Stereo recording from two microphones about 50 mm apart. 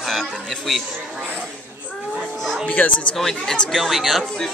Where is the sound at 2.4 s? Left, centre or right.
Centre.